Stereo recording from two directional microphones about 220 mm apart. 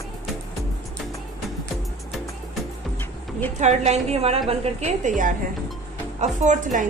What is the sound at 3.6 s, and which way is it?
A woman's voice, 30° right (ahead or behind).